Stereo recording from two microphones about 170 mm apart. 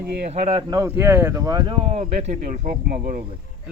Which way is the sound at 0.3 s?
40° right (ahead or behind).